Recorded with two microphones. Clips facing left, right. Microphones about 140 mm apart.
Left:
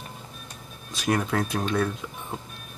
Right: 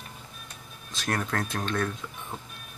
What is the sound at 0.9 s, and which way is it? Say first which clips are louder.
Speech: left 5 dB; 10° left (ahead or behind).